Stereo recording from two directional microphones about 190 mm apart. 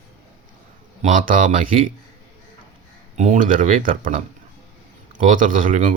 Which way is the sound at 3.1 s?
40° right (ahead or behind).